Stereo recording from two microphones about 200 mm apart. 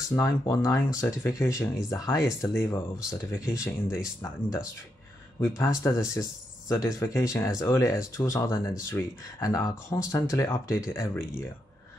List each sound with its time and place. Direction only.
0.1 s speech: 15° left (ahead or behind)